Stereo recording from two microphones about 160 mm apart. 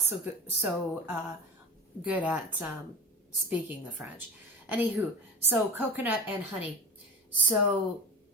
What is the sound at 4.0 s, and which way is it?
A woman's voice, 10° right (ahead or behind).